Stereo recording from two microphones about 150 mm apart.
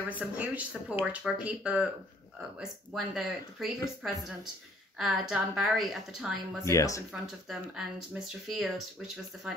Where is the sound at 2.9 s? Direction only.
Centre (ahead or behind).